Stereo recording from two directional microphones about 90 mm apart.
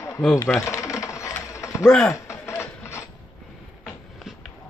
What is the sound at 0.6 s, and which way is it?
Mechanisms, 35° left (ahead or behind).